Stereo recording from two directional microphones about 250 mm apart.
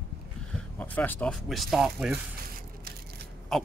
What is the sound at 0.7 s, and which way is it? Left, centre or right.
Speech, centre.